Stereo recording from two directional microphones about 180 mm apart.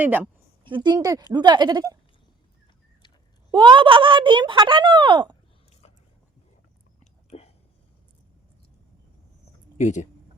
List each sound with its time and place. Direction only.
0.0 s a woman's voice: 10° right (ahead or behind)
0.6 s speech: 25° right (ahead or behind)
3.5 s speech: 25° right (ahead or behind)
7.3 s a sound: 35° left (ahead or behind)
9.7 s speech: 40° left (ahead or behind)